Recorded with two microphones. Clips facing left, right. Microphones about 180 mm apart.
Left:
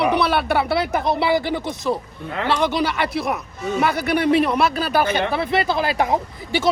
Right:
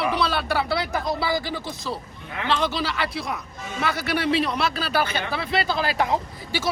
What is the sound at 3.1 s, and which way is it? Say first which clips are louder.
Speech: left 7 dB; 65° left (ahead or behind).